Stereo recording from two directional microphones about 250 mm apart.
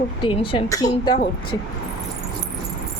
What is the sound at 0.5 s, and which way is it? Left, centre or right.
Speech, centre.